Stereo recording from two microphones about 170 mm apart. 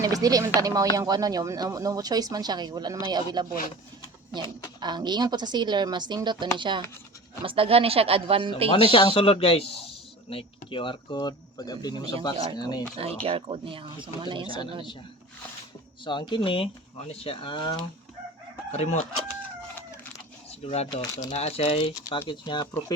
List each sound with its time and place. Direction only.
0.0 s a sound: 20° right (ahead or behind)
0.6 s speech: 20° right (ahead or behind)
4.8 s speech: 25° right (ahead or behind)
8.7 s speech: 30° left (ahead or behind)
13.2 s speech: 35° right (ahead or behind)
16.0 s speech: 25° left (ahead or behind)
18.7 s speech: 40° left (ahead or behind)
20.5 s speech: 35° left (ahead or behind)
21.3 s speech: 35° left (ahead or behind)